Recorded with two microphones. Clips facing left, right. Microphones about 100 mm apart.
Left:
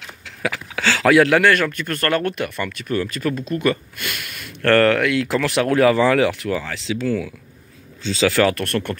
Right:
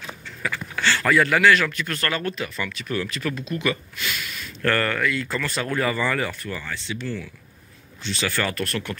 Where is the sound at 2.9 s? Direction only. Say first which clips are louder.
Left 5 dB; 40° left (ahead or behind); by 6.9 s 90° left.